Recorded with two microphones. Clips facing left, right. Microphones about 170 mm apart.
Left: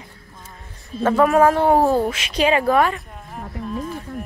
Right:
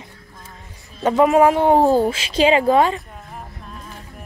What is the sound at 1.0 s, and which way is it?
Speech, 20° right (ahead or behind).